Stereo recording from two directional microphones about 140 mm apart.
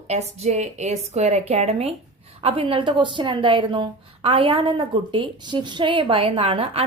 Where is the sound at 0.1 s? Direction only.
50° right (ahead or behind).